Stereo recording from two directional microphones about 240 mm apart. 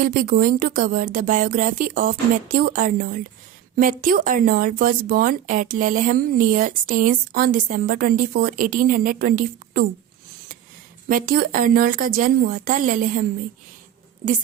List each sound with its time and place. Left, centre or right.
0.0 s speech: right
11.1 s speech: right